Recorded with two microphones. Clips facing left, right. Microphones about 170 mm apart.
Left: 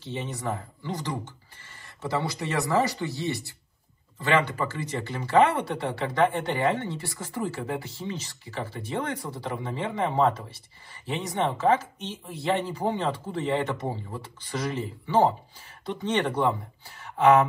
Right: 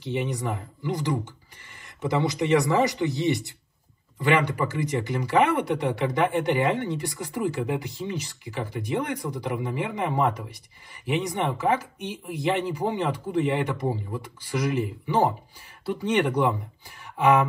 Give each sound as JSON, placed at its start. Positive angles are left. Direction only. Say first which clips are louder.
{"t": 0.0, "sound": "speech", "louder": "right 4 dB", "side_deg": -15}